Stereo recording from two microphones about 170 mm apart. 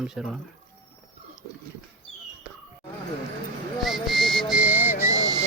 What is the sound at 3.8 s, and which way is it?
Whistle, centre (ahead or behind).